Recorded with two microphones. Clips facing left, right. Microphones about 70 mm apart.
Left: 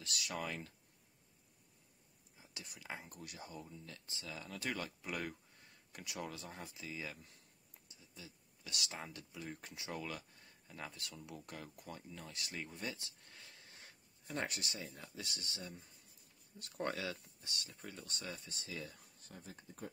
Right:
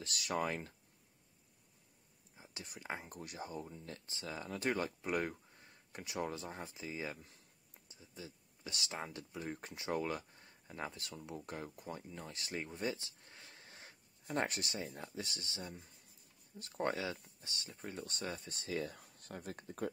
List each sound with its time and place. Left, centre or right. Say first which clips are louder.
0.0 s speech: right 5 dB; right
2.3 s speech: right 3 dB; right
13.2 s a sound: right 2 dB; right
15.0 s speech: right 4 dB; right
16.5 s speech: right 3 dB; right
17.8 s speech: right 6 dB; right